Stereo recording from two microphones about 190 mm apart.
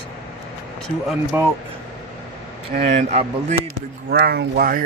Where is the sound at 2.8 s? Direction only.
35° right (ahead or behind).